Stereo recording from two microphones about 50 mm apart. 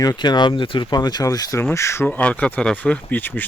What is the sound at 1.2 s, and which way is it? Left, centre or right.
Speech, left.